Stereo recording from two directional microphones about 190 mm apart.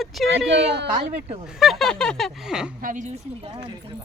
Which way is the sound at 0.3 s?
65° right (ahead or behind).